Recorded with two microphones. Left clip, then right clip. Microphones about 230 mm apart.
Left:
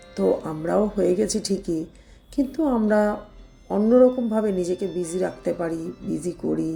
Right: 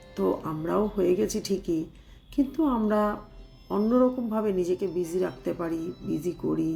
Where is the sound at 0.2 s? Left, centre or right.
Centre.